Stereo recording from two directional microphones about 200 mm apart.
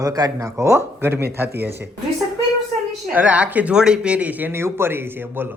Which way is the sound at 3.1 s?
10° right (ahead or behind).